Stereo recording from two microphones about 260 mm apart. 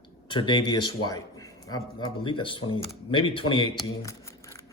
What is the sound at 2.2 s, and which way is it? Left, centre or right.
A man's voice, centre.